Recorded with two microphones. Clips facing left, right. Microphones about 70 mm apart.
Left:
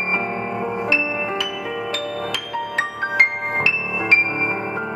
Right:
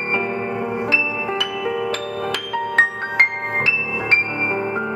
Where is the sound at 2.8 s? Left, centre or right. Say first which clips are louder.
Right 2 dB; right.